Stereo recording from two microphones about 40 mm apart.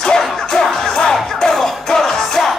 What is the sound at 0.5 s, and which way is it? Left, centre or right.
Music, centre.